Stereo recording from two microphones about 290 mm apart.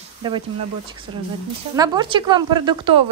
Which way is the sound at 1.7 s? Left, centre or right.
Centre.